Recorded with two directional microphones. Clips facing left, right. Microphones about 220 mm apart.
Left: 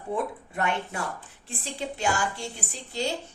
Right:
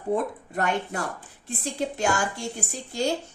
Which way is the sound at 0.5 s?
45° right (ahead or behind).